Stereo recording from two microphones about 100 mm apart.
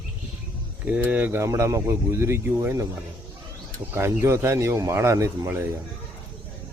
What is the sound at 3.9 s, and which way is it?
Speech, 25° right (ahead or behind).